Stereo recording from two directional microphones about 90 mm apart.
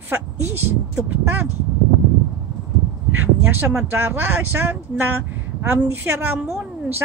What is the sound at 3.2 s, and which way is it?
Speech, 20° right (ahead or behind).